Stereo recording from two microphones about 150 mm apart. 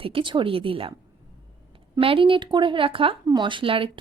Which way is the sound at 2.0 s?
35° right (ahead or behind).